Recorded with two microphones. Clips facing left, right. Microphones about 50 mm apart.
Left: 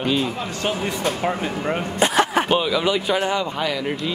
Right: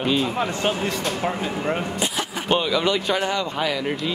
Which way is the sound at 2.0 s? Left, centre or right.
Left.